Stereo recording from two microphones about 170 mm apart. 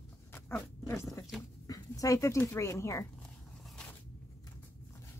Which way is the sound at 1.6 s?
20° left (ahead or behind).